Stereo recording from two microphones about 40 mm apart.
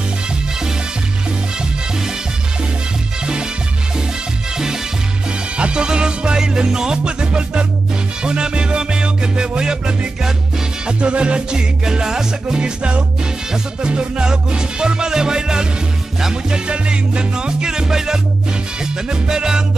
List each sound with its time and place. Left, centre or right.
5.6 s music: right
11.8 s music: centre